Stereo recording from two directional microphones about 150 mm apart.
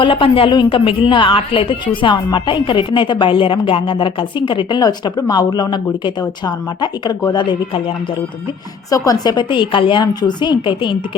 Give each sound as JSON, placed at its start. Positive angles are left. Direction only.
{"t": 0.0, "sound": "a woman's voice", "side_deg": 35}